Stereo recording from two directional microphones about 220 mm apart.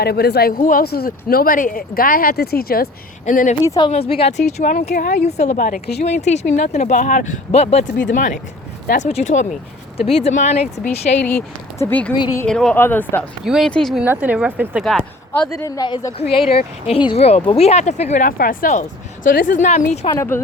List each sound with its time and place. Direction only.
0.0 s speech: 45° left (ahead or behind)
3.6 s speech: 15° left (ahead or behind); by 6.1 s 45° left (ahead or behind)
6.1 s speech: 30° left (ahead or behind)
7.9 s speech: 40° left (ahead or behind)
11.2 s speech: 5° left (ahead or behind)
12.1 s speech: 20° left (ahead or behind)
12.5 s speech: 5° left (ahead or behind)
13.4 s speech: centre (ahead or behind)
15.5 s speech: 15° left (ahead or behind); by 20.1 s 30° left (ahead or behind)
20.1 s speech: 10° left (ahead or behind)